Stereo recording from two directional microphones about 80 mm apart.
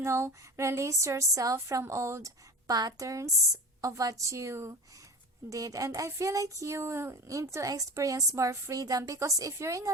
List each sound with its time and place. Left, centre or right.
0.0 s a woman's voice: right
2.6 s a woman's voice: right